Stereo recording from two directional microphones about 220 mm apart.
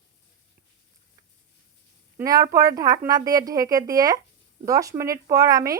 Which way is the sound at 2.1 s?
15° right (ahead or behind).